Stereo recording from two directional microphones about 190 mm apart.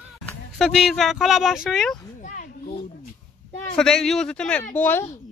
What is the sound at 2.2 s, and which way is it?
Children playing, 40° left (ahead or behind).